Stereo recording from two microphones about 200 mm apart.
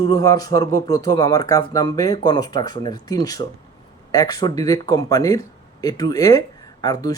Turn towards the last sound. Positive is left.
turn(degrees=20)  # may be behind; listen again after turning